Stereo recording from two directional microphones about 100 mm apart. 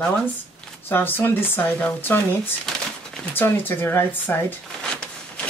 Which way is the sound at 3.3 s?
20° left (ahead or behind).